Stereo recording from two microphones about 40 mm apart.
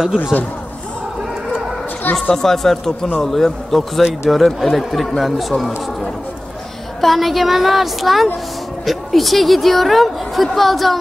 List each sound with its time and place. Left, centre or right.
0.2 s a man's voice: left
2.3 s a woman's voice: centre
7.0 s a woman's voice: centre